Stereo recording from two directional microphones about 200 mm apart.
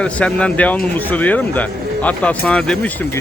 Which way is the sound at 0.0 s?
5° left (ahead or behind).